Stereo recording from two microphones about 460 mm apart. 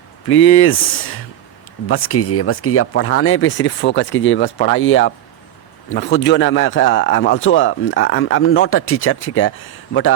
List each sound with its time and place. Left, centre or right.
0.3 s a man's voice: left